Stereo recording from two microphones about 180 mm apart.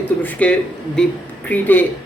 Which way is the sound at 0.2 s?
10° left (ahead or behind).